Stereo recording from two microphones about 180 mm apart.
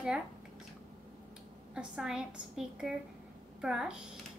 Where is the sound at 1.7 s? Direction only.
5° right (ahead or behind).